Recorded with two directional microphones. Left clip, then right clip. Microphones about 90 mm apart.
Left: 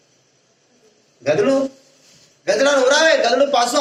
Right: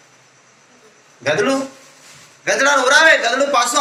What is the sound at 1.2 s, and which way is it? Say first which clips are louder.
Speech: even; 20° left (ahead or behind).